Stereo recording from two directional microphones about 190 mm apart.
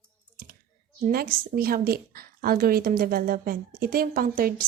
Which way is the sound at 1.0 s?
50° right (ahead or behind).